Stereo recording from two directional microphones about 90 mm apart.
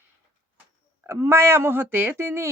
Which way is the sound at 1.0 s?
30° right (ahead or behind).